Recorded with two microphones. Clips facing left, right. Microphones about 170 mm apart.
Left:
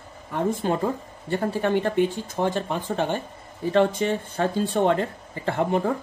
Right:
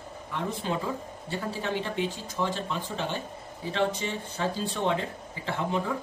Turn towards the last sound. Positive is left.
turn(degrees=55)  # may be behind; listen again after turning